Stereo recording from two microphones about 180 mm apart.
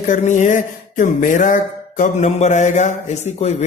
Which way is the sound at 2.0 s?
40° left (ahead or behind).